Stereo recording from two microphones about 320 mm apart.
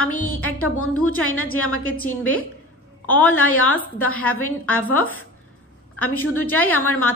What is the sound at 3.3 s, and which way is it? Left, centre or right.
A woman's voice, left.